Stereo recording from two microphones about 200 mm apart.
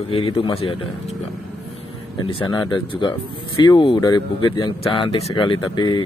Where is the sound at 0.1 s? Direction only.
30° left (ahead or behind).